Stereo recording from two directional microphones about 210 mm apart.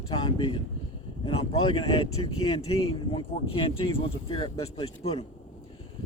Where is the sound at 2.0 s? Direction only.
90° left.